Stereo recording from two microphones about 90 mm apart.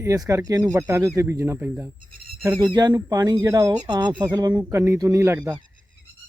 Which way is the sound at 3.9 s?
55° right (ahead or behind).